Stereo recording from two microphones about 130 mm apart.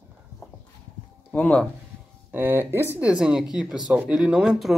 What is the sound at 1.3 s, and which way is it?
Speech, 10° left (ahead or behind).